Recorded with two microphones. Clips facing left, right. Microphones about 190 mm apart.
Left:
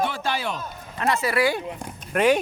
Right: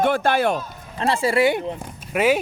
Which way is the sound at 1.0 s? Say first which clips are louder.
Right 3 dB; 30° right (ahead or behind).